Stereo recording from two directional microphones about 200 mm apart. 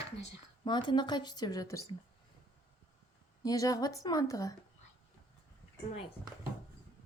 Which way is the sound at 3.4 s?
15° left (ahead or behind).